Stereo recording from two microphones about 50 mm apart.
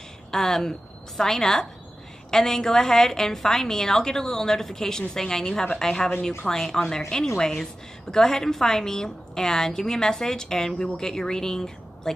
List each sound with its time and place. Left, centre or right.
0.3 s a woman's voice: centre